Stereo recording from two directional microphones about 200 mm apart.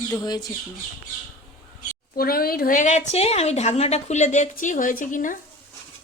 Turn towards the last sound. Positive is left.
turn(degrees=40)  # may be behind; listen again after turning